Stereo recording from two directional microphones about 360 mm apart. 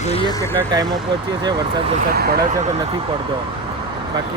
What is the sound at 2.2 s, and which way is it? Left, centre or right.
Speech, right.